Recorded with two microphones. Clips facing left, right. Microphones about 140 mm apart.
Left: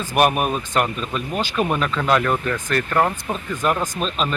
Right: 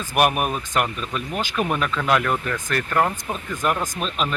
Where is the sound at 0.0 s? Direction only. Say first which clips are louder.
Left 2 dB; 15° right (ahead or behind).